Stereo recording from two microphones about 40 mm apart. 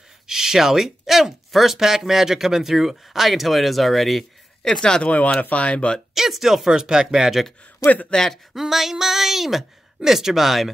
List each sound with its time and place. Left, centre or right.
0.3 s speech: centre
4.6 s speech: centre
5.0 s speech: left
6.1 s speech: centre
6.7 s speech: right
7.8 s a man's voice: left
8.1 s speech: centre
8.5 s speech: centre